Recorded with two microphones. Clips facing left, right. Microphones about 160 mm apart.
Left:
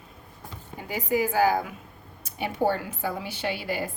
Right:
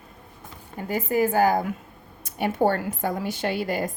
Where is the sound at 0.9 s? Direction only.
50° right (ahead or behind).